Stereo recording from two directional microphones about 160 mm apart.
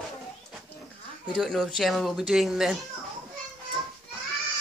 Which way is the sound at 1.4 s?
Centre (ahead or behind).